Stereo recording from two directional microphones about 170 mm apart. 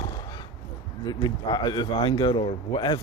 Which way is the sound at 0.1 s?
25° left (ahead or behind).